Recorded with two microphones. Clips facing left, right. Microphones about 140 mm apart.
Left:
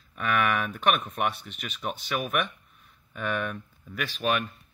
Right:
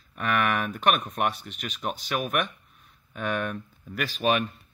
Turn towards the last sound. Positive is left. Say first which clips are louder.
# right 3 dB
turn(degrees=-5)  # may be behind; listen again after turning